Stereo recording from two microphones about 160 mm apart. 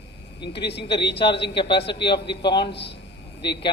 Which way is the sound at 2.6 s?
90° left.